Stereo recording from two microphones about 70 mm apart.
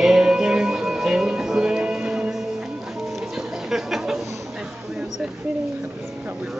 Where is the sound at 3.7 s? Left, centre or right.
Centre.